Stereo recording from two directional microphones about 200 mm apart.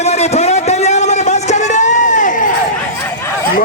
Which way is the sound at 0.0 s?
30° left (ahead or behind).